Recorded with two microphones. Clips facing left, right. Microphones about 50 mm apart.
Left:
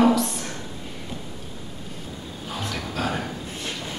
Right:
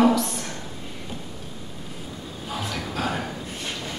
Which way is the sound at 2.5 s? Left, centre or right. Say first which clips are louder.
Right 1 dB; centre.